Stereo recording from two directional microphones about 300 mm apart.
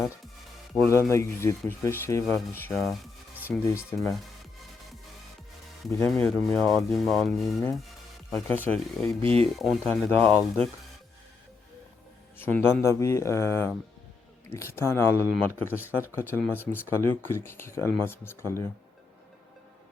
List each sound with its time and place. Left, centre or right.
0.7 s speech: centre
3.3 s music: centre
5.8 s speech: centre
9.2 s speech: centre
9.6 s speech: centre
12.4 s speech: centre